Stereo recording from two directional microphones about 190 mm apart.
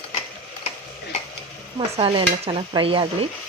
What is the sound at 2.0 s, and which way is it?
Stir, 30° right (ahead or behind).